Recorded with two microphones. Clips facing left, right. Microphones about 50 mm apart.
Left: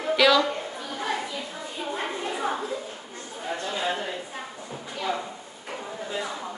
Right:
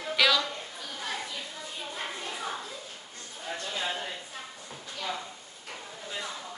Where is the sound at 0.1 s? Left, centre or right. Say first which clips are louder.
Left 6 dB; centre.